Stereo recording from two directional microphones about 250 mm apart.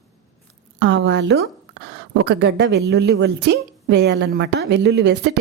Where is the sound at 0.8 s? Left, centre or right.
Right.